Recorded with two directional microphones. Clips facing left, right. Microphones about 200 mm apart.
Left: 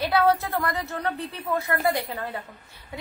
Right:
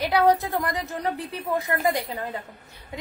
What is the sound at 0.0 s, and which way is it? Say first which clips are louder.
A woman's voice: right 1 dB; 15° right (ahead or behind).